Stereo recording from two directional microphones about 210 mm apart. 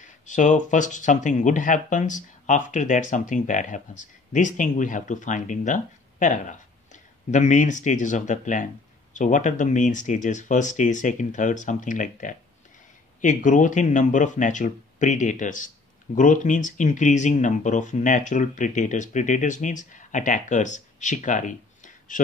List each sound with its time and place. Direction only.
0.0 s speech: 35° left (ahead or behind)